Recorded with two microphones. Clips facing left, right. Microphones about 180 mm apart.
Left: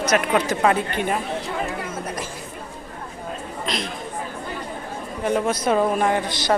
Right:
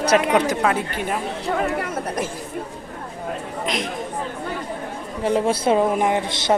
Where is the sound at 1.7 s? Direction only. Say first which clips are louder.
Right 4 dB; 65° right (ahead or behind).